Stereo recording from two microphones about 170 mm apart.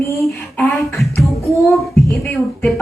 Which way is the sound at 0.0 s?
15° left (ahead or behind).